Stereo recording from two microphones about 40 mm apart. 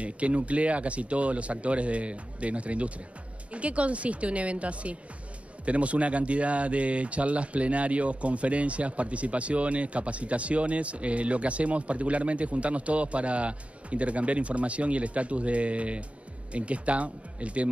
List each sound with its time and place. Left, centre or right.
0.0 s speech: right